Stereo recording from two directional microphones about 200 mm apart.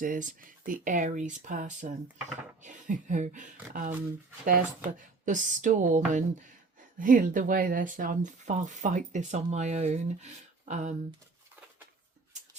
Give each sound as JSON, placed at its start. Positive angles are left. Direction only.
{"t": 0.0, "sound": "speech", "side_deg": -40}